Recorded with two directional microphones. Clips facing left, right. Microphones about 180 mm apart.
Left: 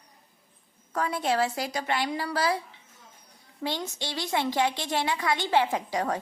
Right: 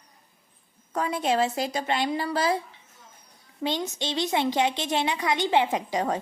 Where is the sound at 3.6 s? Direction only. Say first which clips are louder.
Right 4 dB; 20° right (ahead or behind).